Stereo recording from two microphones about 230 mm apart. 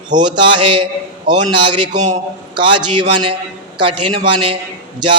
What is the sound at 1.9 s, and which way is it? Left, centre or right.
Speech, right.